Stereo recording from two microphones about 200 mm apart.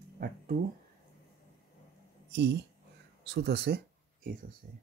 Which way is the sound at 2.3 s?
55° right (ahead or behind).